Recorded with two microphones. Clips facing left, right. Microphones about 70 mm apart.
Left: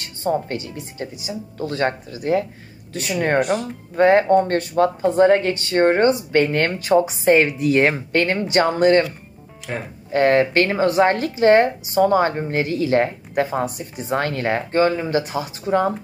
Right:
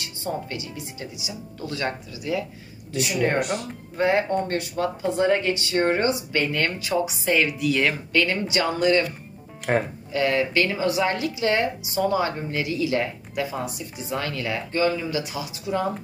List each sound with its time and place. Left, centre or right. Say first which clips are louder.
0.0 s speech: left 8 dB; left
9.7 s speech: right 6 dB; right
10.1 s speech: left 6 dB; left